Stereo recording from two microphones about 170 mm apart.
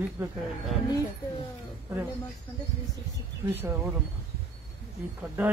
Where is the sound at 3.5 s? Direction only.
10° right (ahead or behind).